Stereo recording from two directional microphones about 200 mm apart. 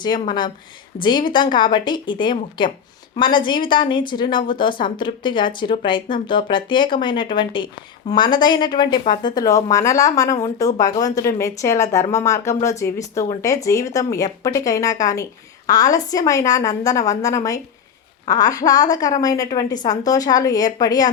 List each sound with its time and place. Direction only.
0.0 s a woman's voice: 20° left (ahead or behind)